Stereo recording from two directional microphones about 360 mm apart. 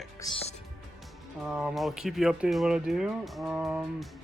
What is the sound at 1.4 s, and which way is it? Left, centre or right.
Speech, centre.